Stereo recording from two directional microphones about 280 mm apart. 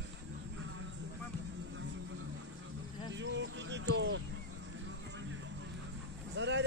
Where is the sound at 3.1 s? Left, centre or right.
Right.